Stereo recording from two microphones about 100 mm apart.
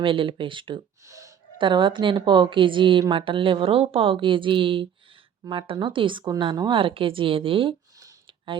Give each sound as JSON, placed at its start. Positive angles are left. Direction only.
{"t": 0.0, "sound": "a woman's voice", "side_deg": -60}
{"t": 1.0, "sound": "gasp", "side_deg": -30}
{"t": 1.5, "sound": "a woman's voice", "side_deg": -55}